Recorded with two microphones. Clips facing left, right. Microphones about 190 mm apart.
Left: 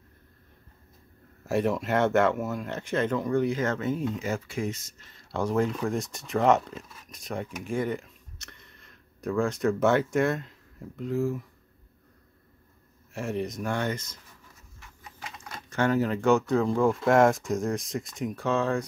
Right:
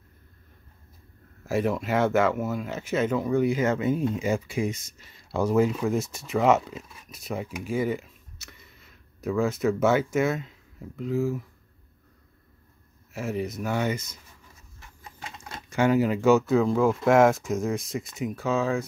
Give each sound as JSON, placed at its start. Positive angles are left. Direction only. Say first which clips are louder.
{"t": 1.4, "sound": "speech", "louder": "even", "side_deg": 0}
{"t": 13.1, "sound": "speech", "louder": "right 1 dB", "side_deg": 0}
{"t": 14.8, "sound": "sewing machine", "louder": "right 1 dB", "side_deg": -25}
{"t": 15.7, "sound": "speech", "louder": "right 3 dB", "side_deg": -10}